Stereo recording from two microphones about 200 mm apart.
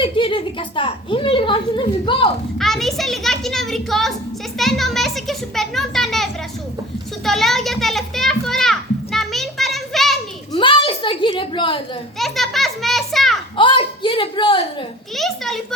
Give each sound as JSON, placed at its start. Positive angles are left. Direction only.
{"t": 0.0, "sound": "a woman's voice", "side_deg": 25}
{"t": 2.6, "sound": "a child's voice", "side_deg": 0}
{"t": 4.5, "sound": "children playing", "side_deg": 0}
{"t": 10.5, "sound": "a sound", "side_deg": 25}
{"t": 12.2, "sound": "children playing", "side_deg": 0}
{"t": 13.6, "sound": "a sound", "side_deg": 25}
{"t": 15.1, "sound": "a child's voice", "side_deg": 0}